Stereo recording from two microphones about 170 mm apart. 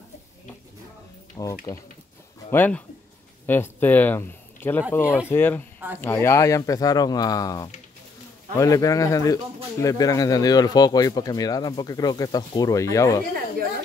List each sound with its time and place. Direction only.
1.3 s speech: 20° left (ahead or behind)
5.0 s speech: 10° right (ahead or behind)
5.3 s speech: 10° left (ahead or behind)